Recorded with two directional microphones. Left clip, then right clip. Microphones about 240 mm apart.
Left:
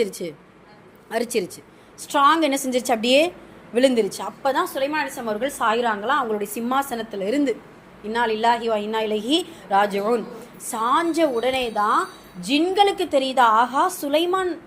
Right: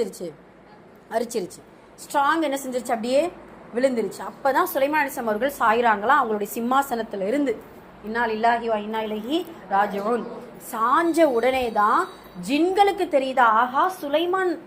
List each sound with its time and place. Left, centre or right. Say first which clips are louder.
0.0 s a woman's voice: left 3 dB; left
4.6 s a woman's voice: right 2 dB; centre
5.5 s a woman's voice: right 2 dB; centre
11.1 s a woman's voice: right 2 dB; centre; by 14.3 s left